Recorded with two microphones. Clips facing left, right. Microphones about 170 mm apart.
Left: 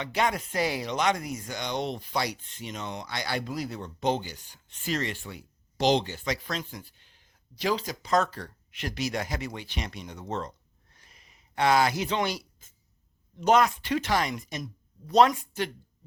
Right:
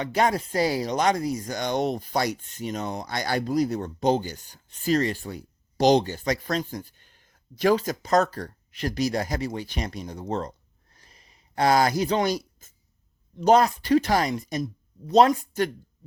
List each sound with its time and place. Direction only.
0.0 s speech: 40° right (ahead or behind)
10.9 s a sound: 35° right (ahead or behind)
13.4 s speech: 35° right (ahead or behind)